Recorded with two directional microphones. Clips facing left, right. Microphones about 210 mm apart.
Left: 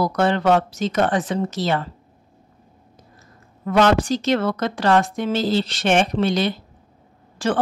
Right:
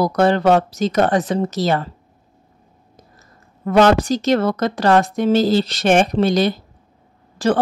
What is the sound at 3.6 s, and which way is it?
Speech, 40° right (ahead or behind).